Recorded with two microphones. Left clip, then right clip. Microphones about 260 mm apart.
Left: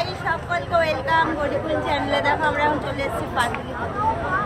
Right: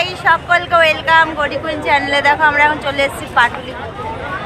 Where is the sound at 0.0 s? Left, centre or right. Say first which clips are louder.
Right 11 dB; right.